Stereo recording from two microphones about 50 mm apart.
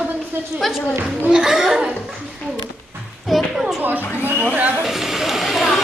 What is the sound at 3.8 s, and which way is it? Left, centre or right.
Speech, right.